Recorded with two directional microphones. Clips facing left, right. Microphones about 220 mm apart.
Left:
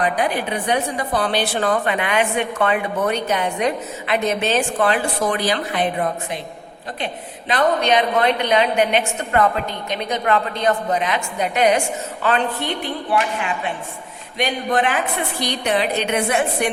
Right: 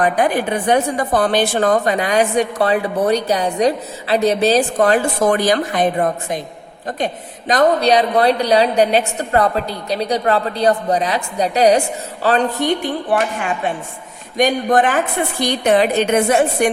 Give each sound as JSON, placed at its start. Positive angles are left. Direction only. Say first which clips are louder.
{"t": 0.0, "sound": "a woman's voice", "louder": "right 4 dB", "side_deg": -50}
{"t": 14.3, "sound": "a woman's voice", "louder": "right 6 dB", "side_deg": -45}